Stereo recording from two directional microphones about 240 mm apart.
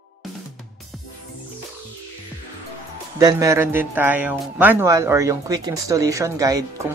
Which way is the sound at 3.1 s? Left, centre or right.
Centre.